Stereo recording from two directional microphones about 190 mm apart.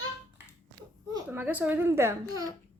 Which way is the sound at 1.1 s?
10° right (ahead or behind).